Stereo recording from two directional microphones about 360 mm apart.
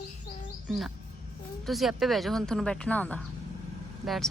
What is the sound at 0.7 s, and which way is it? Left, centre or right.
Speech, centre.